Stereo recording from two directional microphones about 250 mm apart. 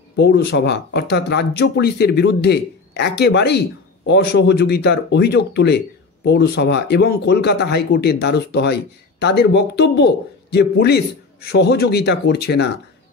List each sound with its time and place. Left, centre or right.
0.1 s speech: left